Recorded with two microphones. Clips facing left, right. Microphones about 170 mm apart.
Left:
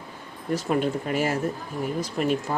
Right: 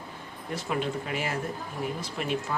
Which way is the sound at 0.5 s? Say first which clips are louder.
Left 6 dB; 45° left (ahead or behind).